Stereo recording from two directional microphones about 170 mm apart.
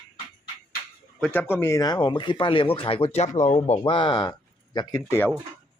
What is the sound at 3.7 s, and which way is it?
Speech, 30° left (ahead or behind).